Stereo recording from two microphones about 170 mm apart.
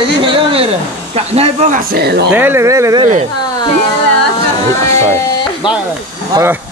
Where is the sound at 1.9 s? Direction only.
70° right (ahead or behind).